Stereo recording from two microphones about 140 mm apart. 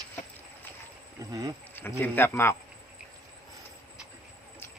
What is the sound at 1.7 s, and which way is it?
Speech, 15° left (ahead or behind).